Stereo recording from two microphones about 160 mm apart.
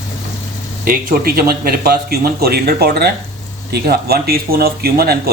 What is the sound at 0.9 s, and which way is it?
Speech, 65° right (ahead or behind).